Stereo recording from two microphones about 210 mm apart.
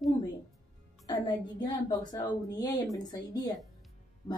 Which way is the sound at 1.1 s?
20° left (ahead or behind).